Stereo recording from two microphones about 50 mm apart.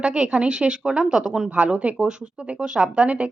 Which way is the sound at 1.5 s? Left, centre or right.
Right.